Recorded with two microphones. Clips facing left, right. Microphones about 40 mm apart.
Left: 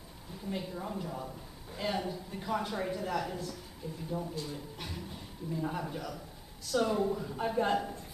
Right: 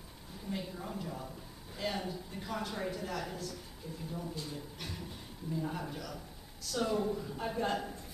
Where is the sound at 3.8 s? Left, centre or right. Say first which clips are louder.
Left 4 dB; left.